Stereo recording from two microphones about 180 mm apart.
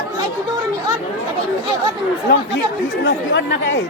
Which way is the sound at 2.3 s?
70° left (ahead or behind).